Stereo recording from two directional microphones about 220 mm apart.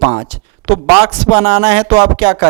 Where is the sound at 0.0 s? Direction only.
25° right (ahead or behind).